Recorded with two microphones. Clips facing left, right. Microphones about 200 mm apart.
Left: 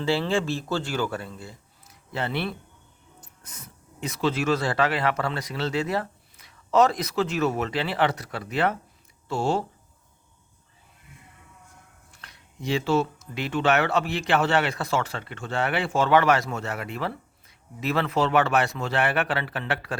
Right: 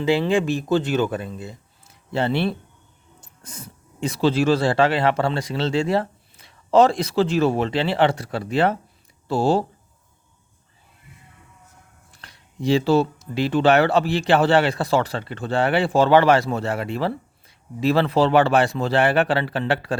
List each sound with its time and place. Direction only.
0.0 s speech: 15° right (ahead or behind); by 9.6 s 35° right (ahead or behind)
12.1 s speech: 30° right (ahead or behind)